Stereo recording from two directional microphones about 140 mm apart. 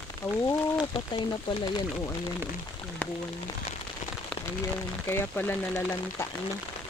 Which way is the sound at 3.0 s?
10° left (ahead or behind).